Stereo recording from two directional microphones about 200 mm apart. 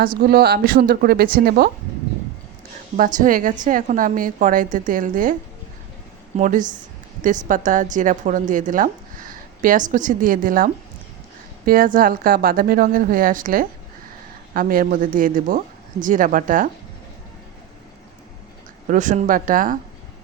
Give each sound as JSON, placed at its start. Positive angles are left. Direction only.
{"t": 0.0, "sound": "speech", "side_deg": -45}
{"t": 3.0, "sound": "a woman's voice", "side_deg": -40}
{"t": 18.9, "sound": "speech", "side_deg": -40}